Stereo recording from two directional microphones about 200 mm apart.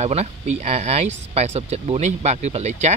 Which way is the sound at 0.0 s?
35° right (ahead or behind).